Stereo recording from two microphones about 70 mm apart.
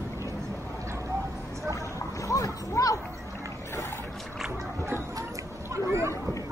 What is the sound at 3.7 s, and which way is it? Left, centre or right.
Boat, left.